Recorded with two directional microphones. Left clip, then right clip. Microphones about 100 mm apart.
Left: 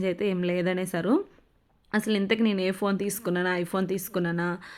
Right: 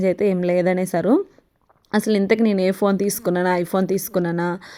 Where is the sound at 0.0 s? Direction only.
35° right (ahead or behind).